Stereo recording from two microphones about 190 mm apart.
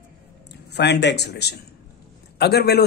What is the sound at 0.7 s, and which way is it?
Speech, 65° left (ahead or behind).